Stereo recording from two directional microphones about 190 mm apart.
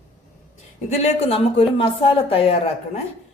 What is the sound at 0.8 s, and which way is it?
Speech, 35° left (ahead or behind).